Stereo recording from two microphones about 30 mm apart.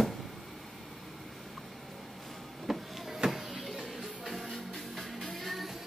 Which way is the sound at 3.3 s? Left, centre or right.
Centre.